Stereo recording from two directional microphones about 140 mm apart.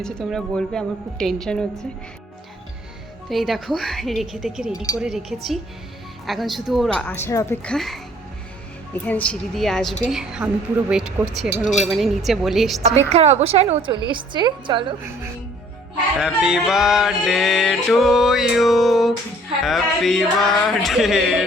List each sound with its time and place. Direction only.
0.0 s music: 5° left (ahead or behind)
3.2 s music: centre (ahead or behind)
4.7 s speech: 25° left (ahead or behind)
4.9 s music: 5° right (ahead or behind)
9.0 s music: 10° left (ahead or behind)
12.8 s a woman's voice: 50° right (ahead or behind); by 14.9 s 35° right (ahead or behind)
16.1 s music: 5° right (ahead or behind)